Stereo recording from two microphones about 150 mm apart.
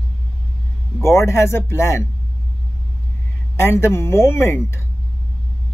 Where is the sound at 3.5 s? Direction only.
15° left (ahead or behind).